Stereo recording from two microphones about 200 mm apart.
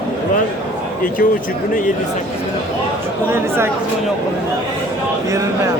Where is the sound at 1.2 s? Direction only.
45° left (ahead or behind).